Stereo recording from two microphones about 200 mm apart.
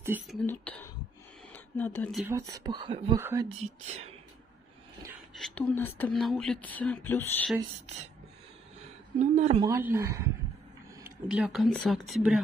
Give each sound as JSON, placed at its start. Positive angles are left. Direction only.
{"t": 0.0, "sound": "speech", "side_deg": -10}
{"t": 0.4, "sound": "speech", "side_deg": 5}
{"t": 2.2, "sound": "speech", "side_deg": -15}
{"t": 3.2, "sound": "a woman's voice", "side_deg": -10}
{"t": 5.3, "sound": "speech", "side_deg": 5}
{"t": 9.2, "sound": "a woman's voice", "side_deg": -35}
{"t": 9.6, "sound": "a woman's voice", "side_deg": -10}